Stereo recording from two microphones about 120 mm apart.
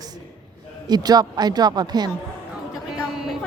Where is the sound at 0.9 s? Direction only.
35° right (ahead or behind).